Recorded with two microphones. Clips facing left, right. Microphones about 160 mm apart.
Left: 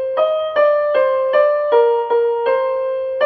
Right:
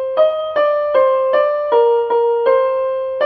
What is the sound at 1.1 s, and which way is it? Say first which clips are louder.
Music: even; 40° left (ahead or behind).